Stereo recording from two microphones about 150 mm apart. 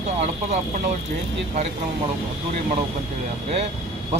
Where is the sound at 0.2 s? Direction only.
50° right (ahead or behind).